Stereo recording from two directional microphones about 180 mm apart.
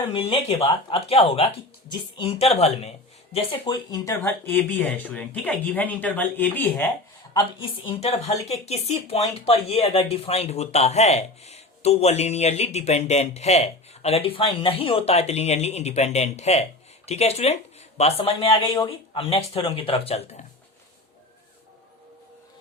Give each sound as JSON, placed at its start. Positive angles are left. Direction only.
{"t": 0.1, "sound": "a woman's voice", "side_deg": 30}
{"t": 3.3, "sound": "speech", "side_deg": 20}
{"t": 7.3, "sound": "a woman's voice", "side_deg": 30}